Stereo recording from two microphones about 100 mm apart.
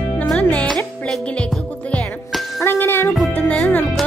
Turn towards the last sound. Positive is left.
turn(degrees=15)  # may be behind; listen again after turning